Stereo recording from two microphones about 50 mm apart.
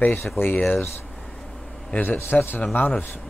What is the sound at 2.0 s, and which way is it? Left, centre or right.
Speech, left.